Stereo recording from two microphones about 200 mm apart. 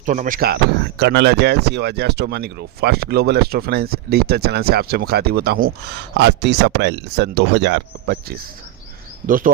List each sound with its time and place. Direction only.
0.0 s speech: 40° right (ahead or behind)